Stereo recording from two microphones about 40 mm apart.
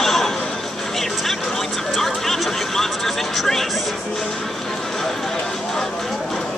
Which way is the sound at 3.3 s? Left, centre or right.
Centre.